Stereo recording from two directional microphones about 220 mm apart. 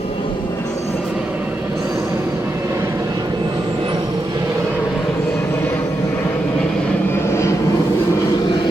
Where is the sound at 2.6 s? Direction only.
15° right (ahead or behind).